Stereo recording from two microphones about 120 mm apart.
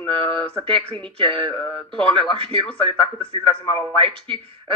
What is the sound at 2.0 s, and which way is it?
A man's voice, 45° right (ahead or behind).